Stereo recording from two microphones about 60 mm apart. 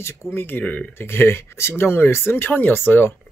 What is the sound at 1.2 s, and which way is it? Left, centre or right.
Speech, left.